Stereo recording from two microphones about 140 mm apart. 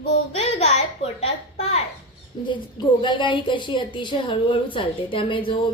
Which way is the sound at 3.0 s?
35° left (ahead or behind).